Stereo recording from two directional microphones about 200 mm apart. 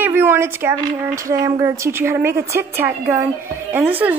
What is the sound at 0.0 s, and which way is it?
A woman's voice, 10° right (ahead or behind).